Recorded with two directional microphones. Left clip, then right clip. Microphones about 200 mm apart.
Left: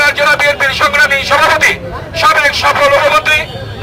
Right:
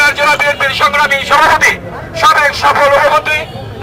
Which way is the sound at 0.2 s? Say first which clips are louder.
Left 1 dB; 20° left (ahead or behind).